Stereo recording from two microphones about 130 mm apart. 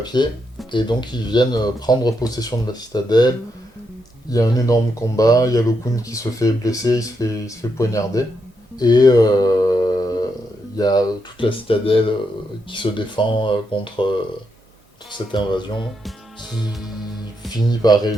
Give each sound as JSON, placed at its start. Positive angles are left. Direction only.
{"t": 0.0, "sound": "speech", "side_deg": 35}
{"t": 8.8, "sound": "a sound", "side_deg": 30}
{"t": 10.8, "sound": "speech", "side_deg": 30}
{"t": 15.1, "sound": "speech", "side_deg": 35}
{"t": 16.0, "sound": "music", "side_deg": -5}
{"t": 17.7, "sound": "speech", "side_deg": 30}